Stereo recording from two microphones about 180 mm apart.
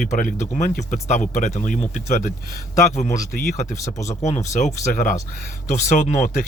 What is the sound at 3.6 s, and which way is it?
Speech, 40° left (ahead or behind).